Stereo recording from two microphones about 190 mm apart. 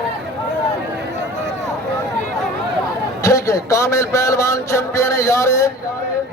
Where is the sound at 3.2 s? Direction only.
15° left (ahead or behind).